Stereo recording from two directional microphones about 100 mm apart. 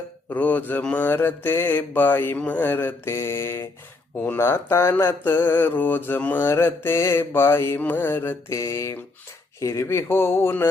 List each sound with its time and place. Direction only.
0.3 s mantra: 15° left (ahead or behind)